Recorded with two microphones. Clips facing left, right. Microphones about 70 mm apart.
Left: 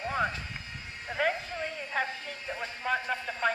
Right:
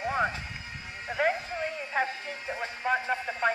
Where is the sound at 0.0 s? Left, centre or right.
Centre.